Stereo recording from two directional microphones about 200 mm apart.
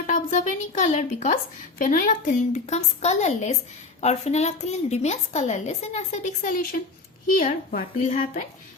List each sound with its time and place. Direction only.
0.1 s a woman's voice: 40° left (ahead or behind)